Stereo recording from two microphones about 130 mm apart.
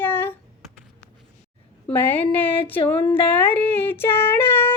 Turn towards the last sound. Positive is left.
turn(degrees=15)  # may be behind; listen again after turning